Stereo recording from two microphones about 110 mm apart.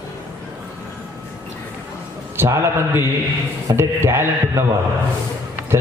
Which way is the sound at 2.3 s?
20° right (ahead or behind).